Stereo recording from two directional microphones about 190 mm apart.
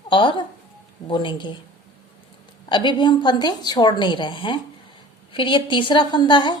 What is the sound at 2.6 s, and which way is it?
A woman's voice, 25° left (ahead or behind).